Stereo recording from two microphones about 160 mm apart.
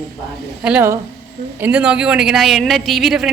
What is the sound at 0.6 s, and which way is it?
A woman's voice, 10° right (ahead or behind).